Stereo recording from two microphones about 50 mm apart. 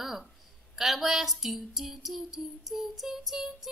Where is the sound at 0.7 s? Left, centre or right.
Centre.